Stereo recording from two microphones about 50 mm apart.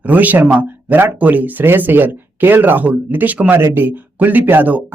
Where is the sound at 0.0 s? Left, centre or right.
Right.